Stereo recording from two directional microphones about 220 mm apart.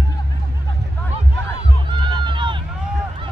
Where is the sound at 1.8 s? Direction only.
20° right (ahead or behind).